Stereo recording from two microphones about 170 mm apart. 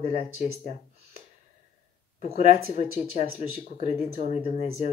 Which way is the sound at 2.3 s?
40° left (ahead or behind).